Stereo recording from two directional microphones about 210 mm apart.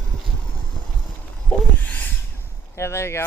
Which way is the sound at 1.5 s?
5° left (ahead or behind).